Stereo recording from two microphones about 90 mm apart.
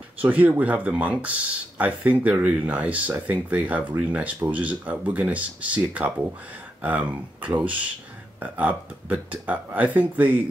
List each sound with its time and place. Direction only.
0.2 s speech: 15° right (ahead or behind)